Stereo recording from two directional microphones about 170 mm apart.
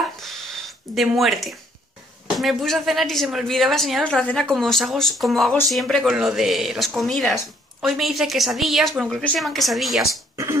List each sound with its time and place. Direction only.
0.2 s a sound: centre (ahead or behind)
2.3 s speech: centre (ahead or behind)
10.3 s speech: 15° right (ahead or behind)